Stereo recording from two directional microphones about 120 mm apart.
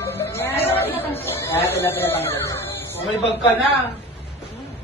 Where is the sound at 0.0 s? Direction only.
20° left (ahead or behind).